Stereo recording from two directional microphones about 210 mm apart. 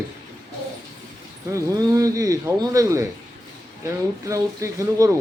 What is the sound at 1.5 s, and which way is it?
Speech, 15° right (ahead or behind).